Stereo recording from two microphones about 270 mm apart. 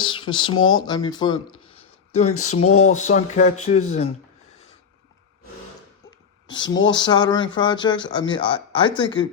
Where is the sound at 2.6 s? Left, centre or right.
Left.